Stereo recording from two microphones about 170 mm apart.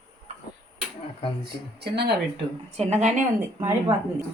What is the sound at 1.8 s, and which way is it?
Speech, 75° right (ahead or behind).